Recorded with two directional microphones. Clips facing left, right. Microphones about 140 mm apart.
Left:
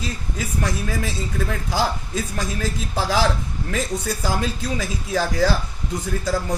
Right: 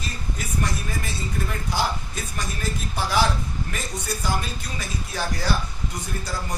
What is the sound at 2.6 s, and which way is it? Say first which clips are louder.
Speech: left 3 dB; 90° left.